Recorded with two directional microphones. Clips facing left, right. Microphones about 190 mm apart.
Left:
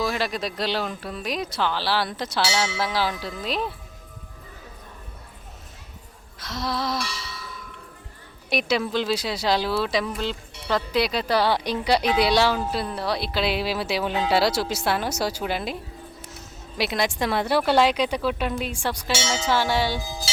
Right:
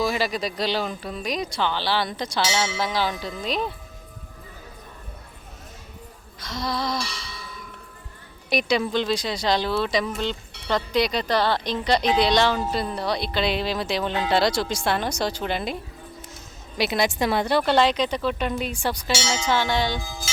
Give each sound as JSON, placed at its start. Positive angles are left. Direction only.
{"t": 0.0, "sound": "speech", "side_deg": 0}
{"t": 6.4, "sound": "speech", "side_deg": 5}
{"t": 8.4, "sound": "speech", "side_deg": 0}
{"t": 19.5, "sound": "tubular bells", "side_deg": 5}
{"t": 20.0, "sound": "music", "side_deg": 35}